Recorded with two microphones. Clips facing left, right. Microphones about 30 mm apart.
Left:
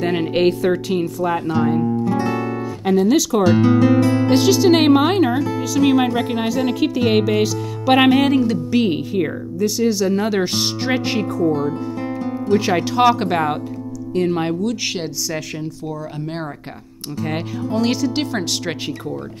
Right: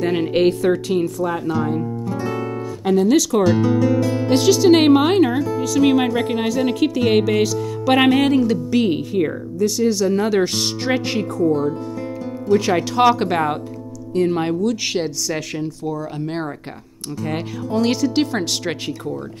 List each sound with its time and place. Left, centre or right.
0.0 s speech: centre
2.0 s music: left
2.8 s speech: centre
3.6 s speech: left
4.3 s speech: centre
17.2 s speech: centre
17.7 s speech: centre